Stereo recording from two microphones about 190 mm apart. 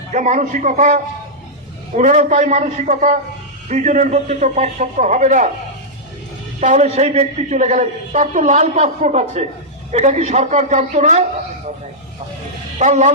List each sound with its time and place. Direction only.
0.1 s a man's voice: 40° right (ahead or behind)
2.0 s a man's voice: 40° right (ahead or behind)
6.6 s a man's voice: 40° right (ahead or behind)
12.8 s a man's voice: 40° right (ahead or behind)